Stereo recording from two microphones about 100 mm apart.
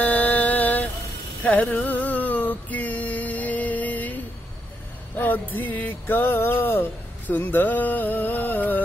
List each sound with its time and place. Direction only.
0.0 s mantra: 15° left (ahead or behind)
1.4 s a sound: 15° left (ahead or behind)
5.2 s music: 20° left (ahead or behind)